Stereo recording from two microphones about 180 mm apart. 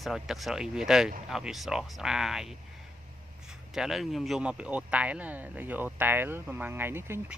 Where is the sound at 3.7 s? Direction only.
Centre (ahead or behind).